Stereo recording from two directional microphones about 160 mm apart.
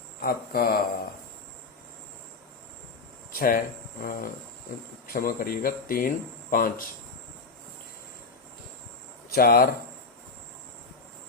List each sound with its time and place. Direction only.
0.2 s speech: 70° left (ahead or behind)
3.3 s speech: 60° left (ahead or behind)
9.3 s speech: 70° left (ahead or behind)